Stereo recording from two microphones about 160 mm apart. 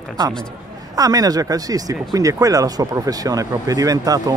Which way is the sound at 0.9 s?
25° right (ahead or behind).